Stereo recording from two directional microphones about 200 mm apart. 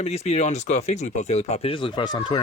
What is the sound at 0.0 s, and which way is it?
Speech, 35° left (ahead or behind).